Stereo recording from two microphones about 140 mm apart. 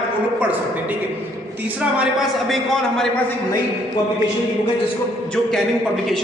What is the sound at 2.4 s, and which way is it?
Speech, 5° left (ahead or behind).